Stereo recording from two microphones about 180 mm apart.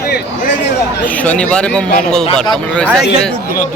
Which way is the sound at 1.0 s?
10° left (ahead or behind).